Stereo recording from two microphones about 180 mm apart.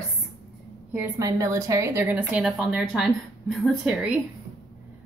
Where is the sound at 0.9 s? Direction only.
15° right (ahead or behind).